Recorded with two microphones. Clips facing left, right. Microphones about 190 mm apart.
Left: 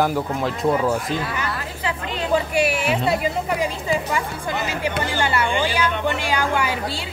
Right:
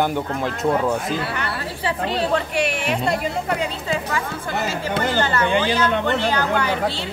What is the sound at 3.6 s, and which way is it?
Music, 15° left (ahead or behind).